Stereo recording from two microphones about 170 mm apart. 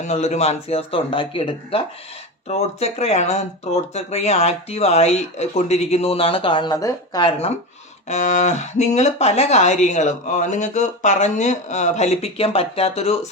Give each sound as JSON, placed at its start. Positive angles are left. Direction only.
{"t": 0.0, "sound": "speech", "side_deg": 40}
{"t": 8.0, "sound": "speech", "side_deg": 45}